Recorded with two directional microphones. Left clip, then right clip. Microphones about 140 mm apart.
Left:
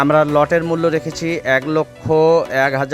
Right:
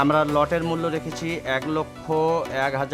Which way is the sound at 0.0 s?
40° left (ahead or behind).